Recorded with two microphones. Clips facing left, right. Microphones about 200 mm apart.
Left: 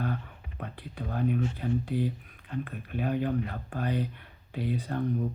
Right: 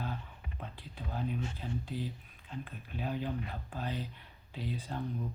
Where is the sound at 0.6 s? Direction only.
60° left (ahead or behind).